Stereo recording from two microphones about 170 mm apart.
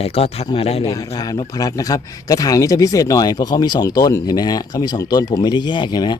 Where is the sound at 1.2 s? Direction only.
20° left (ahead or behind).